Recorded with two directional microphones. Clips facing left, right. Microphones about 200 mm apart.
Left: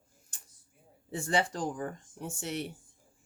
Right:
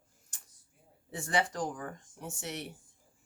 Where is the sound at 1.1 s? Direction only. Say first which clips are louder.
Left 2 dB; 30° left (ahead or behind).